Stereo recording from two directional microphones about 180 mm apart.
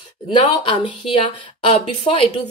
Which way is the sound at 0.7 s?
30° left (ahead or behind).